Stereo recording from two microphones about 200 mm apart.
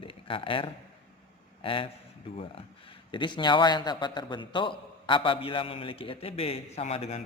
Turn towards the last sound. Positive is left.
turn(degrees=30)  # may be behind; listen again after turning